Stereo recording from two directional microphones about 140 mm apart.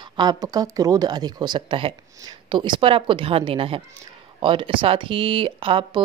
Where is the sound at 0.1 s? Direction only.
30° right (ahead or behind).